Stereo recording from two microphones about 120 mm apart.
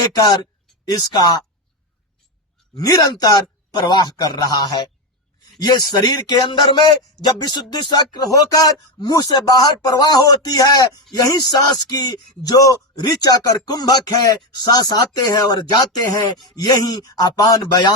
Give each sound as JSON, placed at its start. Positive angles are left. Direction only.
{"t": 0.9, "sound": "a man's voice", "side_deg": 35}
{"t": 2.7, "sound": "a man's voice", "side_deg": 30}